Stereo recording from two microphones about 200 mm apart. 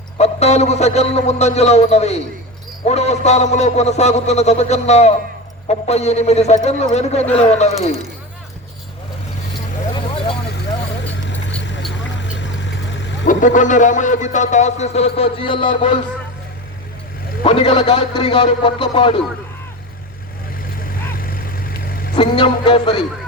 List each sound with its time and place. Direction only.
0.2 s speech: 35° left (ahead or behind)
11.9 s vehicle: 65° left (ahead or behind)
13.2 s speech: 40° left (ahead or behind)
17.4 s a man's voice: 25° left (ahead or behind)
21.2 s a sound: 45° left (ahead or behind)
22.1 s a man's voice: 25° left (ahead or behind)